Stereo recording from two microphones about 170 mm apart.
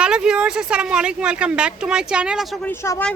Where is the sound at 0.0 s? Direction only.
5° right (ahead or behind).